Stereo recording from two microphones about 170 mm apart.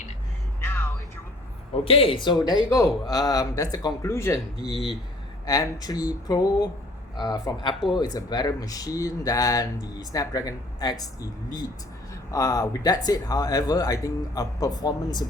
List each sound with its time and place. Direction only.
0.6 s music: 15° left (ahead or behind)
1.7 s speech: 35° left (ahead or behind); by 4.4 s 15° left (ahead or behind)
4.7 s speech: centre (ahead or behind)
5.5 s speech: 20° left (ahead or behind)